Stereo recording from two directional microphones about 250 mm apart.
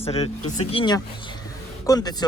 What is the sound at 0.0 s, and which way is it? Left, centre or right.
Speech, left.